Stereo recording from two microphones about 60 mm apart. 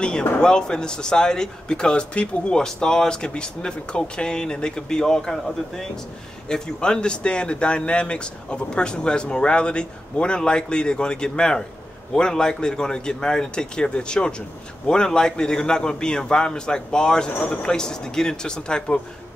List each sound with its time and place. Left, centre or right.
0.0 s speech: centre